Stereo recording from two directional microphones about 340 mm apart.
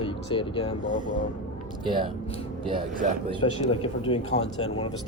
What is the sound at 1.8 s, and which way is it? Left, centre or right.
Speech, centre.